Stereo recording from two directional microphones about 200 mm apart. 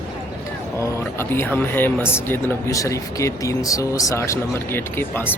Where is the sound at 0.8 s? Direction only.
10° left (ahead or behind).